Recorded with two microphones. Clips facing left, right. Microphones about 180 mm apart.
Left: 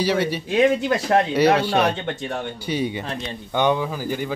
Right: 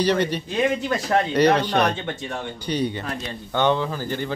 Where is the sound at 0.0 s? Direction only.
5° left (ahead or behind).